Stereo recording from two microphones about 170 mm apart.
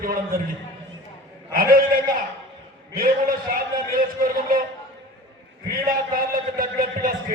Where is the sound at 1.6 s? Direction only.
55° right (ahead or behind).